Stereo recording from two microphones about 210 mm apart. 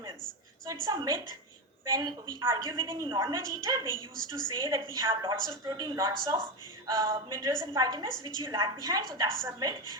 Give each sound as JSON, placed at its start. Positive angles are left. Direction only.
{"t": 0.7, "sound": "a woman's voice", "side_deg": -20}